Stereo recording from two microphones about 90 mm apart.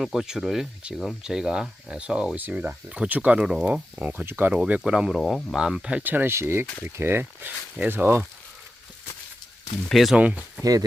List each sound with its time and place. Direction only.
0.0 s speech: 5° right (ahead or behind); by 4.5 s 20° right (ahead or behind)
4.5 s speech: 10° right (ahead or behind)
9.9 s speech: centre (ahead or behind)
10.6 s speech: 40° right (ahead or behind)